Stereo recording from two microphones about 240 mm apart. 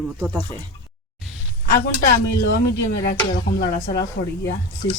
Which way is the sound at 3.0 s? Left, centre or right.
Left.